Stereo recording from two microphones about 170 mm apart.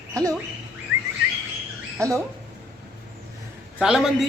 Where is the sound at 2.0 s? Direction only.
15° right (ahead or behind).